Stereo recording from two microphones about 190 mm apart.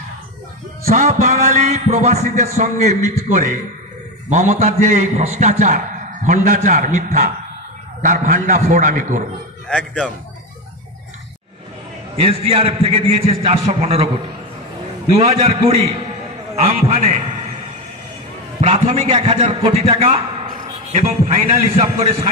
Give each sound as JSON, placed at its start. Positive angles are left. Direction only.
{"t": 0.8, "sound": "a man's voice", "side_deg": -40}
{"t": 9.7, "sound": "speech", "side_deg": 5}
{"t": 12.2, "sound": "a man's voice", "side_deg": -30}
{"t": 15.1, "sound": "a man's voice", "side_deg": -30}
{"t": 18.6, "sound": "a sound", "side_deg": -40}
{"t": 18.9, "sound": "a man's voice", "side_deg": -30}
{"t": 21.0, "sound": "a man's voice", "side_deg": -45}
{"t": 21.5, "sound": "a man's voice", "side_deg": -30}